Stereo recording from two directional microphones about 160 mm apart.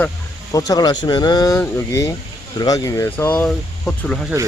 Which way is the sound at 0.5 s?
25° left (ahead or behind).